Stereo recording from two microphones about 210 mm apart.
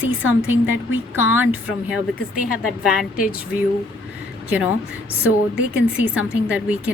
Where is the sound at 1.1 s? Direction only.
10° right (ahead or behind).